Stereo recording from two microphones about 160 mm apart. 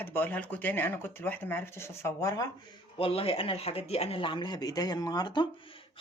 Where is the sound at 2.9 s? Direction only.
35° left (ahead or behind).